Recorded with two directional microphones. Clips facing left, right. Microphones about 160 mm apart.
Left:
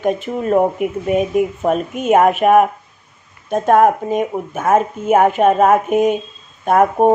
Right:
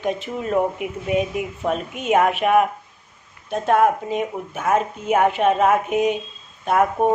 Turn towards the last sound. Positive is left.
turn(degrees=50)  # may be behind; listen again after turning